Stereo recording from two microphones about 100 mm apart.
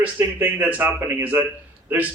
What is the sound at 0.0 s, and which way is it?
A man's voice, 20° right (ahead or behind).